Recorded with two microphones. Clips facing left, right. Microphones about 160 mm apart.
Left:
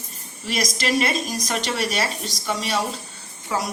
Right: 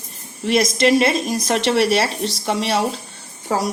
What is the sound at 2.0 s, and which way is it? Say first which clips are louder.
Speech: right 5 dB; 30° right (ahead or behind).